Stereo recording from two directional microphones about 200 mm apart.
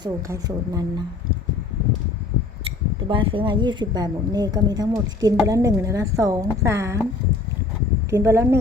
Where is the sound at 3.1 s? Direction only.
25° right (ahead or behind).